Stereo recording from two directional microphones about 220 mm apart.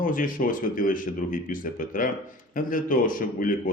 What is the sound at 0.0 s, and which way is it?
Speech, 40° left (ahead or behind).